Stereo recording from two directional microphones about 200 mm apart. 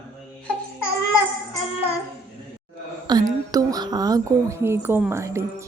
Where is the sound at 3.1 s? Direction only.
20° right (ahead or behind).